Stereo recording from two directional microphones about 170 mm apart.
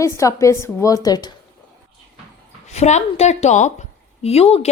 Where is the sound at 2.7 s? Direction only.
40° left (ahead or behind).